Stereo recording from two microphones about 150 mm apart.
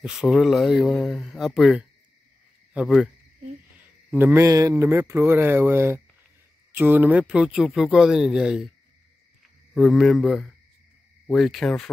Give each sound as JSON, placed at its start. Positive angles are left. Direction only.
{"t": 0.0, "sound": "a man's voice", "side_deg": -5}
{"t": 9.8, "sound": "speech", "side_deg": 0}